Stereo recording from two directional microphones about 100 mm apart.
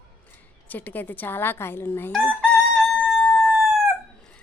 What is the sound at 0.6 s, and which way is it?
A woman's voice, 15° left (ahead or behind).